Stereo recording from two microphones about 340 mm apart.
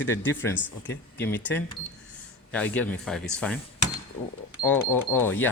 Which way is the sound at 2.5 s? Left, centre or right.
Centre.